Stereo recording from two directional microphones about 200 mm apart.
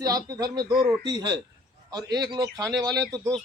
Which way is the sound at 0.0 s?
15° right (ahead or behind).